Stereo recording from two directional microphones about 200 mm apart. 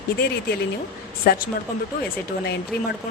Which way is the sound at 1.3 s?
50° left (ahead or behind).